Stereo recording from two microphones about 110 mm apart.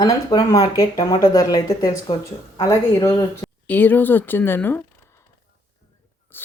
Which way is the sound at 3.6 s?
15° left (ahead or behind).